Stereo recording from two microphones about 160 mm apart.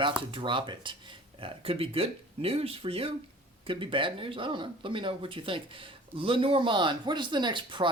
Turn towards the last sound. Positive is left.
turn(degrees=-30)  # may be behind; listen again after turning